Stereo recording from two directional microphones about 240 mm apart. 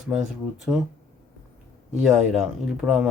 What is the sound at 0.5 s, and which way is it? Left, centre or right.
Speech, centre.